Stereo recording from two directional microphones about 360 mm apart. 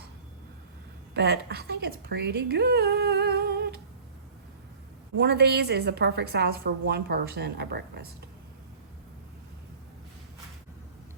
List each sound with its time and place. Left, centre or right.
1.1 s a woman's voice: right
5.1 s a woman's voice: right